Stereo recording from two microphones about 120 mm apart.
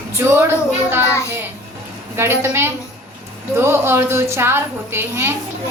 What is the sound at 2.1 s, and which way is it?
A woman's voice, 20° right (ahead or behind).